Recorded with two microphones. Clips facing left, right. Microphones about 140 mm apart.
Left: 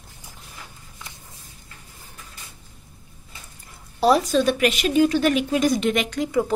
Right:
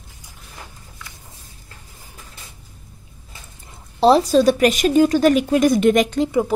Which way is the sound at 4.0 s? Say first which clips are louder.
Right 5 dB; 30° right (ahead or behind).